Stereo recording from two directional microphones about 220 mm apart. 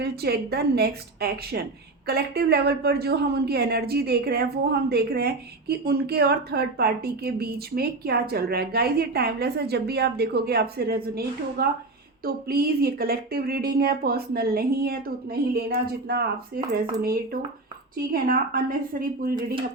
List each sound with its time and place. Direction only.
0.0 s speech: 45° right (ahead or behind)